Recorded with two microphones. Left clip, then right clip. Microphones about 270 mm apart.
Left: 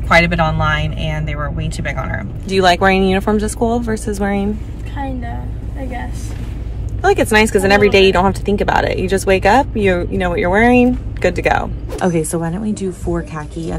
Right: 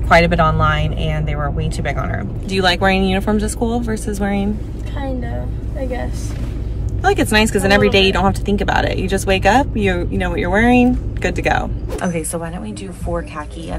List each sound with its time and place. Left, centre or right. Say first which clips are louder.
0.1 s speech: even; centre
2.4 s speech: left 4 dB; centre
7.0 s speech: left 3 dB; centre
12.0 s speech: left 5 dB; left